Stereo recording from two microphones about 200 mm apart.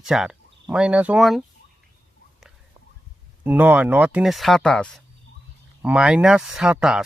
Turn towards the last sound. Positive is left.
turn(degrees=-5)  # may be behind; listen again after turning